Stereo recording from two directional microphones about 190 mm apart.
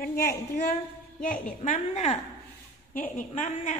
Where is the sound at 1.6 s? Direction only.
35° left (ahead or behind).